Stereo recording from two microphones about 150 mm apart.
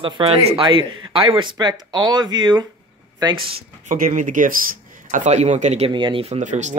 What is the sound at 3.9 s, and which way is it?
Speech, 65° right (ahead or behind).